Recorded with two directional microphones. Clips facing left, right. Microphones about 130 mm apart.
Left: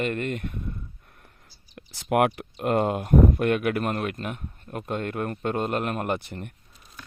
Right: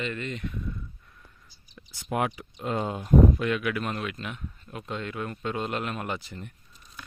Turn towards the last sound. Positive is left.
turn(degrees=60)  # may be behind; listen again after turning